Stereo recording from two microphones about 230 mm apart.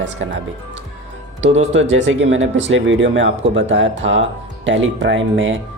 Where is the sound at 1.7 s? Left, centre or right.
Right.